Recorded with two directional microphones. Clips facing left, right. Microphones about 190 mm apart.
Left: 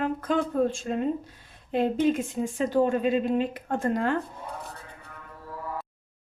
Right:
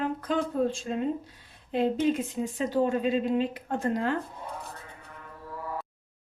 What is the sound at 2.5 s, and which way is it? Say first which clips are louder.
Speech: left 3 dB; 50° left (ahead or behind).